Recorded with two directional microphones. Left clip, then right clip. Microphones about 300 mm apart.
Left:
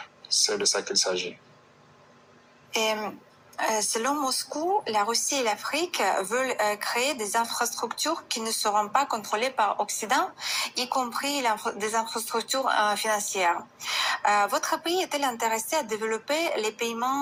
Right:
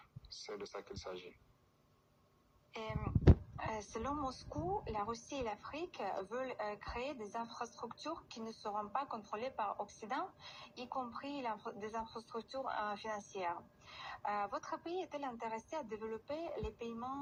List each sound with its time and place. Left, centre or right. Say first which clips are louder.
0.4 s a woman's voice: left 18 dB; left
2.7 s a woman's voice: left 18 dB; left
6.4 s speech: left 16 dB; left
7.0 s a woman's voice: left 17 dB; left